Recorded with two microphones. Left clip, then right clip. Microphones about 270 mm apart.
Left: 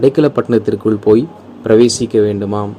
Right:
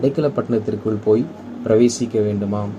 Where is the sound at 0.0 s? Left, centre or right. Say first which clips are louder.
Left 7 dB; left.